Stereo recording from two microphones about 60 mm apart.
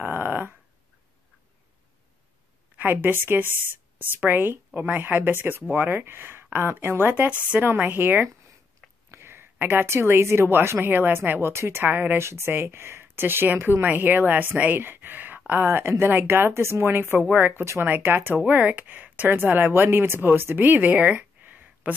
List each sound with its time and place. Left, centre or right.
0.0 s a sound: right
2.8 s speech: right
9.1 s a sound: right
9.7 s a woman's voice: right
11.5 s a woman's voice: right
11.8 s speech: right
12.2 s speech: right
18.5 s speech: right